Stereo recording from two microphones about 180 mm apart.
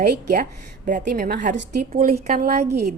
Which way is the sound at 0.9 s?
45° right (ahead or behind).